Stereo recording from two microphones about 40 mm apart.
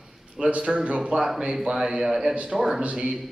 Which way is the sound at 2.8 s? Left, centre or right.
Right.